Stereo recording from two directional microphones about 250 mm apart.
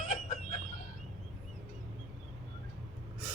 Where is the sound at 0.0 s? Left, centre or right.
Left.